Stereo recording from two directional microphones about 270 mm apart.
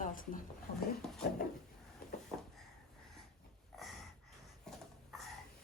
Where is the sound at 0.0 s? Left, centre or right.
Left.